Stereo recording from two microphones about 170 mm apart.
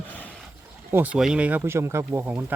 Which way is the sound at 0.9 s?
10° right (ahead or behind).